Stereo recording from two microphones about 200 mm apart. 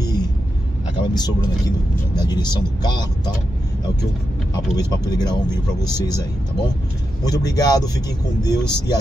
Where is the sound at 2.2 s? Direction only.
20° left (ahead or behind).